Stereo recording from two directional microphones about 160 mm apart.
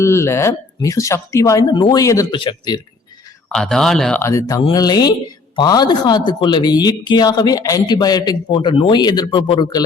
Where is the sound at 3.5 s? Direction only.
5° left (ahead or behind).